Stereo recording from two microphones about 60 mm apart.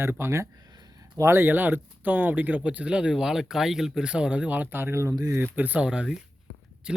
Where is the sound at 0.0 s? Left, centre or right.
Right.